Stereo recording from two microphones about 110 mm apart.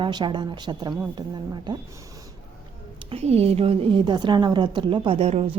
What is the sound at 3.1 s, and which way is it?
Speech, 70° right (ahead or behind).